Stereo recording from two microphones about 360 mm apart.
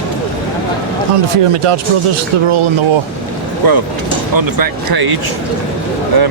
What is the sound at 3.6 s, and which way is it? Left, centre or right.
Speech, right.